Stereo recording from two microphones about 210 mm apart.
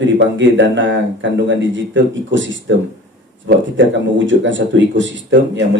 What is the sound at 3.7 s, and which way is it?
Speech, 60° right (ahead or behind).